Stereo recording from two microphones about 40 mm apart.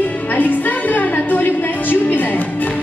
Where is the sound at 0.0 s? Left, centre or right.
Left.